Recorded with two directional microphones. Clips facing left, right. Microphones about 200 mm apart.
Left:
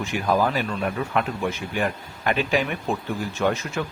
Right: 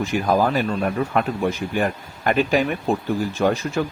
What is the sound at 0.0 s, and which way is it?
Speech, 40° right (ahead or behind).